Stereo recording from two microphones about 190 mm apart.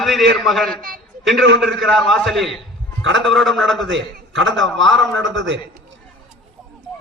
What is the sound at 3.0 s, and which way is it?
Speech, 80° right.